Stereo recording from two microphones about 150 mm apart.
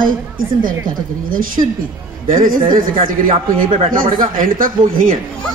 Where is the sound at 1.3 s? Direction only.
65° right (ahead or behind).